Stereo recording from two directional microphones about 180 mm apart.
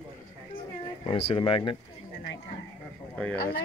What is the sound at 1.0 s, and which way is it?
Speech, 30° left (ahead or behind).